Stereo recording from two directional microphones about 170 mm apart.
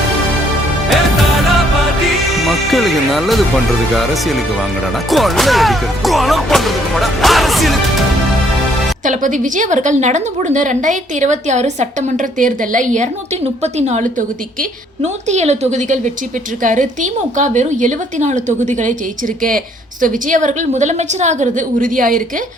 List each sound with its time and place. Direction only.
2.5 s music: centre (ahead or behind)
3.9 s speech: centre (ahead or behind)
9.0 s a woman's voice: 50° right (ahead or behind)